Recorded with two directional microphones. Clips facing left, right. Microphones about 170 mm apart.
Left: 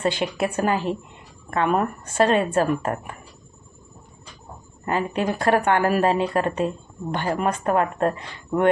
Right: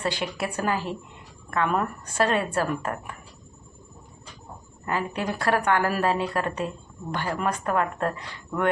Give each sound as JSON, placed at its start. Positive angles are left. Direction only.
{"t": 0.0, "sound": "speech", "side_deg": 20}
{"t": 4.9, "sound": "speech", "side_deg": 25}